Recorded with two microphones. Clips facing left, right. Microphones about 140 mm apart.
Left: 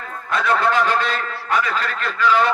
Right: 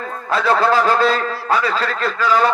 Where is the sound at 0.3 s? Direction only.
35° right (ahead or behind).